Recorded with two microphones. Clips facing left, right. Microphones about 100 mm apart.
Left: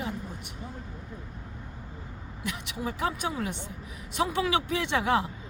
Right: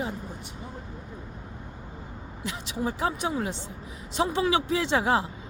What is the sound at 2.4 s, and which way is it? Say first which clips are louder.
A woman's voice: right 3 dB; 30° right (ahead or behind).